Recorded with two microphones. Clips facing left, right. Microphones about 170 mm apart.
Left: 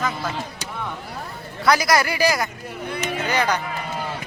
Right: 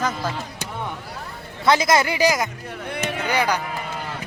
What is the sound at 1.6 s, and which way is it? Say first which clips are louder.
Speech: right 1 dB; 25° right (ahead or behind).